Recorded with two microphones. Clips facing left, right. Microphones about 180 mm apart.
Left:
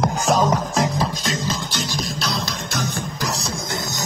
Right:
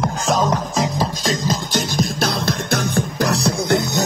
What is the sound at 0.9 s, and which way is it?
Music, 40° right (ahead or behind).